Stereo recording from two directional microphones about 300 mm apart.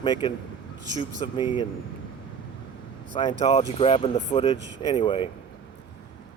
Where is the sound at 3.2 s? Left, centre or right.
Centre.